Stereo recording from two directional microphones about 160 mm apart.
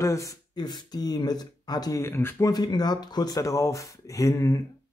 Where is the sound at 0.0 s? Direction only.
20° left (ahead or behind).